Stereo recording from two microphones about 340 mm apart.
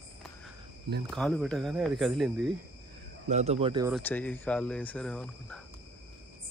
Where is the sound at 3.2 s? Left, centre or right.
Centre.